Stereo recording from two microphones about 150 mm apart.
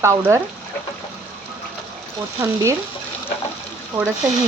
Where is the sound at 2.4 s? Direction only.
20° right (ahead or behind).